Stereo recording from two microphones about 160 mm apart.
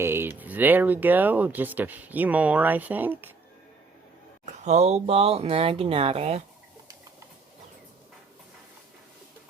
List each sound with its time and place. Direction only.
0.0 s speech: 15° right (ahead or behind)
4.6 s speech: 45° right (ahead or behind)